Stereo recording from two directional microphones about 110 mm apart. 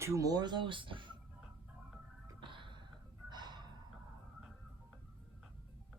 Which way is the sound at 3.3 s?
40° right (ahead or behind).